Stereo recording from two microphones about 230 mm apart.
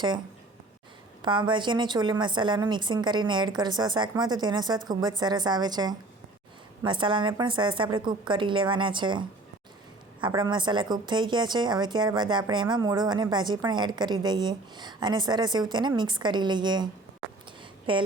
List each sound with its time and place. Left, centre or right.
1.2 s a woman's voice: centre